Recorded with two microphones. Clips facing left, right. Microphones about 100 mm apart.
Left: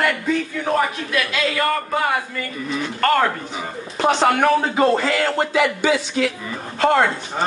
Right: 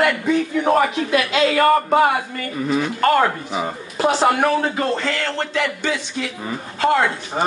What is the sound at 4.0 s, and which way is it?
Speech, 5° right (ahead or behind).